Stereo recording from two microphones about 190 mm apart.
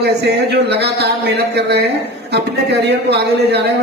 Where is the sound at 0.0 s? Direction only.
60° right (ahead or behind).